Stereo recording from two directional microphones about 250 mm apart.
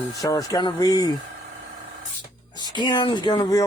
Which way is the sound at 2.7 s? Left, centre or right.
Centre.